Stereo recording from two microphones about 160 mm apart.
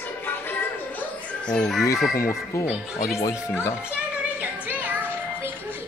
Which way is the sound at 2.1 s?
20° left (ahead or behind).